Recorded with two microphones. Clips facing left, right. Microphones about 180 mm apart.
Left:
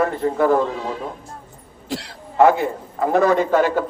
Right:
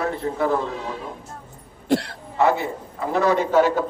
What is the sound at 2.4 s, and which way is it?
A man's voice, 50° left (ahead or behind).